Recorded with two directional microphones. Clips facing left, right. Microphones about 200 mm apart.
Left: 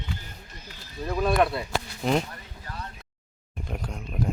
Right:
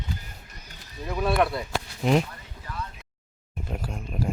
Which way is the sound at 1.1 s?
5° right (ahead or behind).